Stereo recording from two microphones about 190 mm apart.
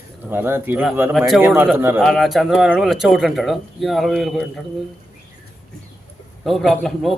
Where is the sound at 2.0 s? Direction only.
Centre (ahead or behind).